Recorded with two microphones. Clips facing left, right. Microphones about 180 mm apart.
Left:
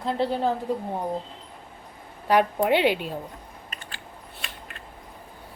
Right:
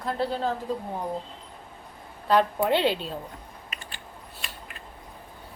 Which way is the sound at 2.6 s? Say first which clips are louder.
Left 2 dB; 10° left (ahead or behind).